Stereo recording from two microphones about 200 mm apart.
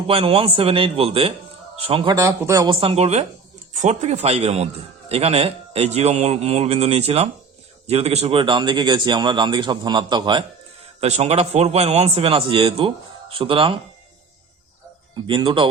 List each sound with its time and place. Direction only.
0.1 s a man's voice: 30° right (ahead or behind)
15.3 s speech: 25° right (ahead or behind)